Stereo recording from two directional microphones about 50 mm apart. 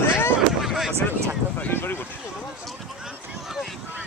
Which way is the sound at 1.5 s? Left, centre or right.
Left.